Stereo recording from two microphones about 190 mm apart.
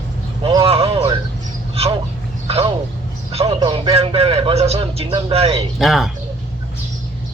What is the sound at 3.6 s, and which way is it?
A man's voice, 30° right (ahead or behind).